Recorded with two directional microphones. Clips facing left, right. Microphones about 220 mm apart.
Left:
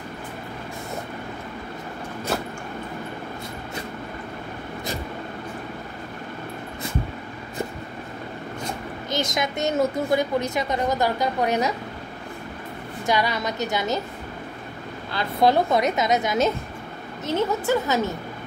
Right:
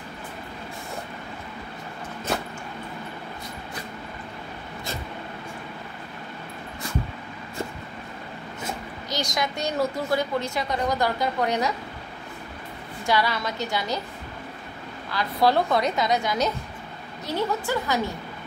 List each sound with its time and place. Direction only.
9.2 s a woman's voice: 20° left (ahead or behind)
13.0 s a woman's voice: 20° left (ahead or behind)
15.1 s a woman's voice: 20° left (ahead or behind)